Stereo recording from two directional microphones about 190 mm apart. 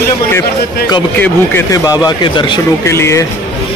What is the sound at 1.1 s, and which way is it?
Speech, 10° left (ahead or behind).